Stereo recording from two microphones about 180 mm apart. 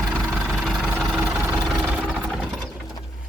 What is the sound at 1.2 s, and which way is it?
Engine, 5° right (ahead or behind).